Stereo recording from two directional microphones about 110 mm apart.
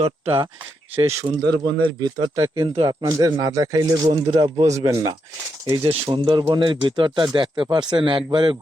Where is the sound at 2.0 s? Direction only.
35° right (ahead or behind).